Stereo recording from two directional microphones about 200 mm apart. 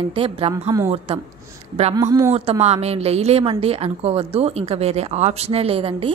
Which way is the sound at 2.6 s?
30° right (ahead or behind).